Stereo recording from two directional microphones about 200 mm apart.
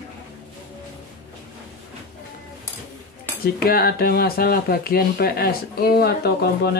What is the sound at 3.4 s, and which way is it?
Speech, 50° left (ahead or behind).